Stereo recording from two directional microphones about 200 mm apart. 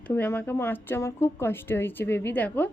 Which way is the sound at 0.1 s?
10° left (ahead or behind).